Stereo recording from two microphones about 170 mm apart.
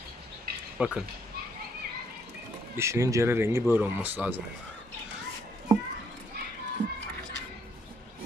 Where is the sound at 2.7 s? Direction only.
15° right (ahead or behind).